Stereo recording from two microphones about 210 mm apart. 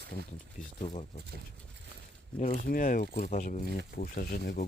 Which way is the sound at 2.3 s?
35° left (ahead or behind).